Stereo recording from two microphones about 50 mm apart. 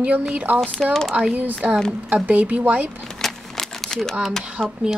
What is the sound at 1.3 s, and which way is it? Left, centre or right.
Speech, right.